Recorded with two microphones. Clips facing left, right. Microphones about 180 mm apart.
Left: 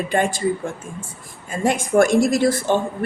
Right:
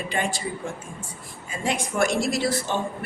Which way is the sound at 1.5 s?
50° left (ahead or behind).